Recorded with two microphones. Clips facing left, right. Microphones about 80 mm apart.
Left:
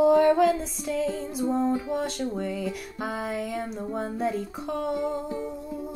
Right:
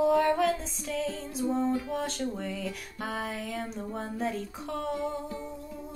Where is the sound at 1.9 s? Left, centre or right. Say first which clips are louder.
Left 4 dB; centre.